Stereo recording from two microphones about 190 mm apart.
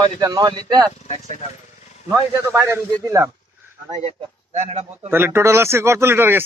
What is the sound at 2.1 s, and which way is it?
Speech, 15° right (ahead or behind).